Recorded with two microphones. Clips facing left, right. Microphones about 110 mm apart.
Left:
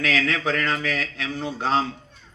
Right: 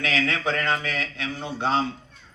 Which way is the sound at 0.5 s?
35° right (ahead or behind).